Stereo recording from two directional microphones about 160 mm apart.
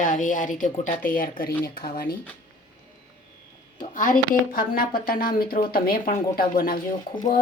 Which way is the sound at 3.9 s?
60° left (ahead or behind).